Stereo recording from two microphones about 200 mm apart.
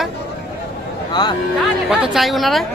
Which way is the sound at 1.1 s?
20° left (ahead or behind).